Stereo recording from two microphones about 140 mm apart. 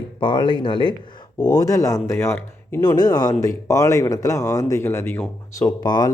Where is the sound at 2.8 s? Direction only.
30° left (ahead or behind).